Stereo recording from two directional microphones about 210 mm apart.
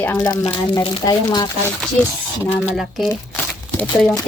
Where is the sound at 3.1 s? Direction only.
10° left (ahead or behind).